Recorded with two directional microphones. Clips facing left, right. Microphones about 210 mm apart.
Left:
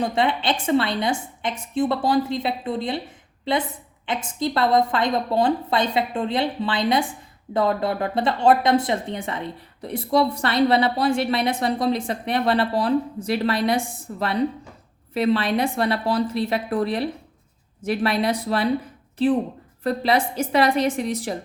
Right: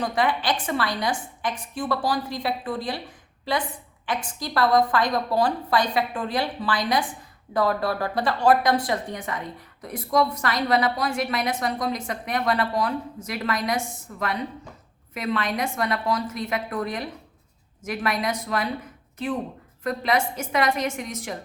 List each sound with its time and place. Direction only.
0.0 s a woman's voice: 25° left (ahead or behind)
4.0 s a woman's voice: 25° left (ahead or behind)